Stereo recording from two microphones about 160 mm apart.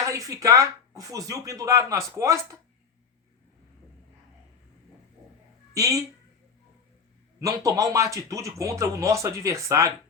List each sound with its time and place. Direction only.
0.0 s speech: 20° right (ahead or behind)
5.7 s speech: 20° right (ahead or behind)
7.3 s speech: 20° right (ahead or behind)